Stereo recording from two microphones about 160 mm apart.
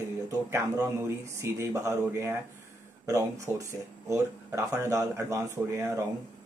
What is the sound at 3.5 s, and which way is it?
Speech, 15° right (ahead or behind).